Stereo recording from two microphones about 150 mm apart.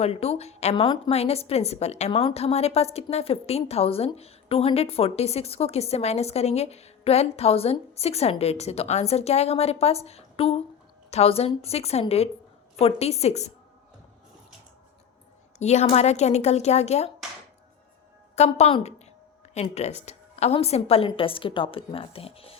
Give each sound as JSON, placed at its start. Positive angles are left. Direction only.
{"t": 0.0, "sound": "a woman's voice", "side_deg": 45}
{"t": 15.5, "sound": "a woman's voice", "side_deg": 50}
{"t": 18.3, "sound": "a woman's voice", "side_deg": 45}